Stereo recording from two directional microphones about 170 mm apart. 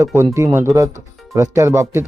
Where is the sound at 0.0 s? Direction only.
15° right (ahead or behind).